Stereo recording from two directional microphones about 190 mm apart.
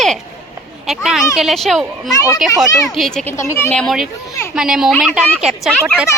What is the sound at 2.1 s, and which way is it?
Speech, 20° left (ahead or behind).